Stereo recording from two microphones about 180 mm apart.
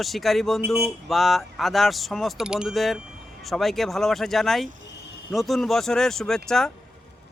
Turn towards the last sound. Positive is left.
turn(degrees=5)  # may be behind; listen again after turning